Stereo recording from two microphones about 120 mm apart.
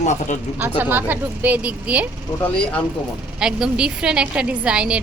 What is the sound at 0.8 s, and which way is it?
A woman's voice, 15° right (ahead or behind).